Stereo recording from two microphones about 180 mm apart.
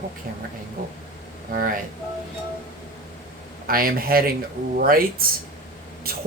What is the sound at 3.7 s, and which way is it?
Speech, 55° right (ahead or behind).